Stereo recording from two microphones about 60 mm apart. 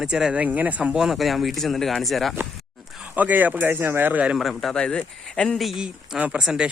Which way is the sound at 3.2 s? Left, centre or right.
Right.